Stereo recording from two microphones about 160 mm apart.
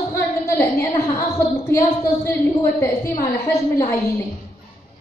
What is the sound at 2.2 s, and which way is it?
A woman's voice, 20° left (ahead or behind).